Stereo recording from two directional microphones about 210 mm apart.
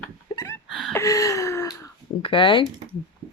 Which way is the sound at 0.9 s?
15° left (ahead or behind).